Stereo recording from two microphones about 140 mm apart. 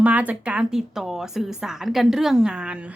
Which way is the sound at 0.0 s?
10° right (ahead or behind).